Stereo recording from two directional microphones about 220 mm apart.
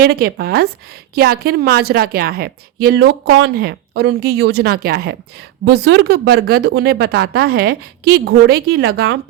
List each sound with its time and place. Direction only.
0.0 s a woman's voice: 45° right (ahead or behind)